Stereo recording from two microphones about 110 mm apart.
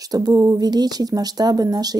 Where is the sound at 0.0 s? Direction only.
35° right (ahead or behind).